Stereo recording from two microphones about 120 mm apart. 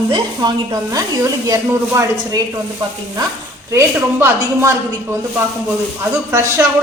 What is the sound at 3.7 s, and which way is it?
Speech, 25° right (ahead or behind).